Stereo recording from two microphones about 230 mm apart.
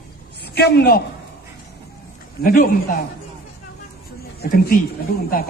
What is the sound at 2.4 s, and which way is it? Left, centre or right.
Speech, left.